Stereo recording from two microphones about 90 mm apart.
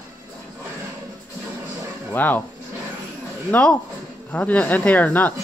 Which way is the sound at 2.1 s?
20° left (ahead or behind).